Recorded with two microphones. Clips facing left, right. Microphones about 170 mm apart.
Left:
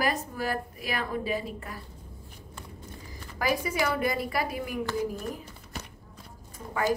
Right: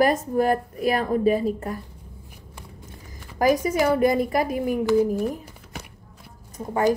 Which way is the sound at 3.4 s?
45° right (ahead or behind).